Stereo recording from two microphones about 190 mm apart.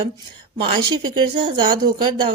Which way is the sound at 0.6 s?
25° right (ahead or behind).